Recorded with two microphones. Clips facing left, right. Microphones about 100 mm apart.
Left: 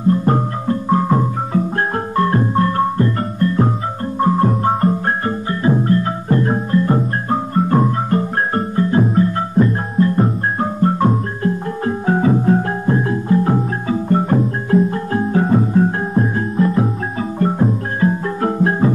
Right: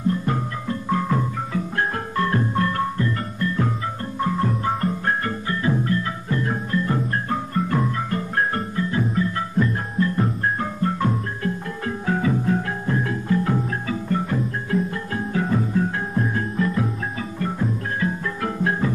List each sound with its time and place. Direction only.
0.0 s music: 40° left (ahead or behind)